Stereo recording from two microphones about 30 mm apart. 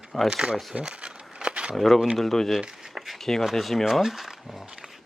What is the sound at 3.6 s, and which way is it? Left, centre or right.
Speech, centre.